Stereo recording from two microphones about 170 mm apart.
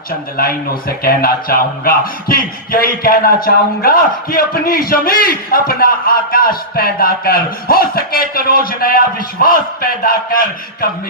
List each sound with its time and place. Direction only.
0.3 s speech: 60° left (ahead or behind)